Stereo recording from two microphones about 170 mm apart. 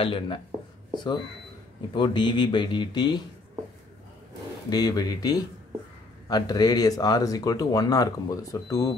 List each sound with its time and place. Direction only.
0.0 s speech: 30° left (ahead or behind)
4.6 s speech: 20° left (ahead or behind)